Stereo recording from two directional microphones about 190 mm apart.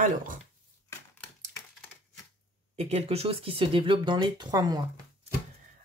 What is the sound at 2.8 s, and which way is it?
Speech, 35° right (ahead or behind).